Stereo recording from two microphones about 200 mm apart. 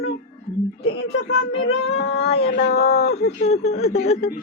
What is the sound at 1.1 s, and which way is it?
Speech, 65° left (ahead or behind).